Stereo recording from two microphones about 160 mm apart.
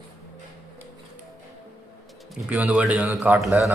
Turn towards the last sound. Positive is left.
turn(degrees=-5)  # may be behind; listen again after turning